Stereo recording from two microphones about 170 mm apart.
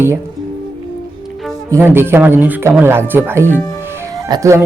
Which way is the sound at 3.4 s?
10° left (ahead or behind).